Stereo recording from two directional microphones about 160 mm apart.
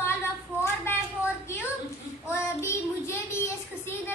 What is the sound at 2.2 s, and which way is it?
Child singing, 15° left (ahead or behind).